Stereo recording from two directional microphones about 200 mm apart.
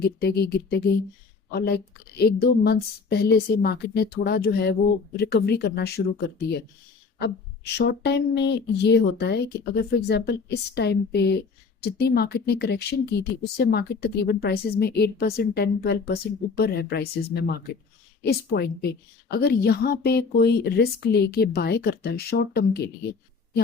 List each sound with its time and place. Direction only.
0.0 s a woman's voice: 50° left (ahead or behind)